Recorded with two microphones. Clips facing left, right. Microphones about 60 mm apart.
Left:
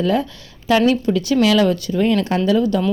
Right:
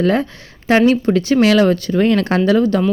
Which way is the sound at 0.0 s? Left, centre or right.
Right.